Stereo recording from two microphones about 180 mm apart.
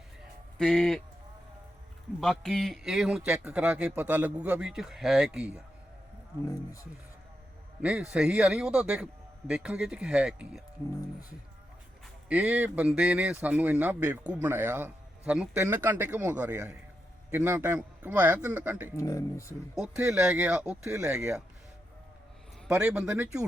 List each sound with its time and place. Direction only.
0.6 s a man's voice: 5° left (ahead or behind)
2.2 s a man's voice: centre (ahead or behind)
7.8 s a man's voice: 5° right (ahead or behind)
12.3 s speech: 10° right (ahead or behind)
18.9 s speech: 15° left (ahead or behind)
19.7 s speech: 5° right (ahead or behind)
22.6 s speech: 5° right (ahead or behind)